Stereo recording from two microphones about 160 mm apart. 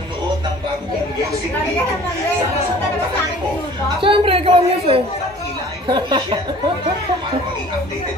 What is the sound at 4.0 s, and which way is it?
A woman's voice, 35° right (ahead or behind).